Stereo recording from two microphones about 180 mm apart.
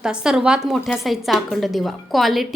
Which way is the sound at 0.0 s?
5° right (ahead or behind).